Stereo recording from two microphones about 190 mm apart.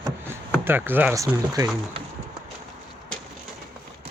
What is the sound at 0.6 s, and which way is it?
Speech, 10° right (ahead or behind).